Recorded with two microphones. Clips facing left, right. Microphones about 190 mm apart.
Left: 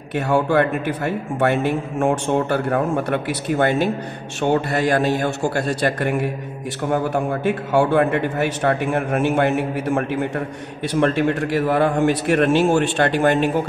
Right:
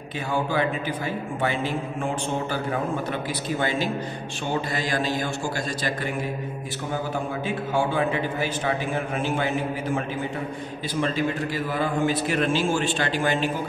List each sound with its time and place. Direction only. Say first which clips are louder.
0.1 s a man's voice: left 8 dB; 70° left (ahead or behind)
7.4 s a man's voice: left 7 dB; 70° left (ahead or behind)